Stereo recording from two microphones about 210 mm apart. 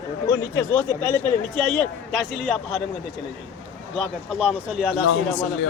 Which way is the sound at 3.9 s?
Centre (ahead or behind).